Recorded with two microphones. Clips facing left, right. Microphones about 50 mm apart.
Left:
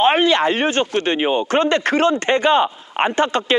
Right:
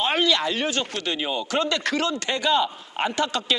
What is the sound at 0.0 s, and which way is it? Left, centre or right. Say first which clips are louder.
Speech: left 7 dB; left.